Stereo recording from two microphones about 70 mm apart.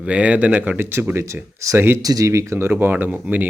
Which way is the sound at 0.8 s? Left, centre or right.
Right.